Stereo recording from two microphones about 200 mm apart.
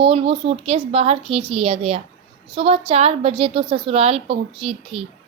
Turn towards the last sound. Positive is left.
turn(degrees=-25)  # may be behind; listen again after turning